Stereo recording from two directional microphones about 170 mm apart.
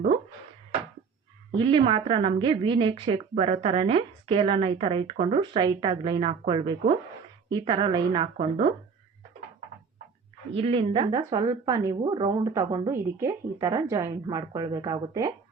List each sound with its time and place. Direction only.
1.5 s a woman's voice: 30° right (ahead or behind)
10.5 s a woman's voice: 35° right (ahead or behind)